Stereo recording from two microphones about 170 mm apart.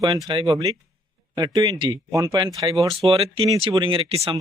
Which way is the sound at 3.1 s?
35° right (ahead or behind).